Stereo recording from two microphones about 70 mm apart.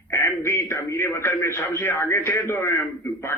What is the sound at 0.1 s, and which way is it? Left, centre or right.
A man's voice, left.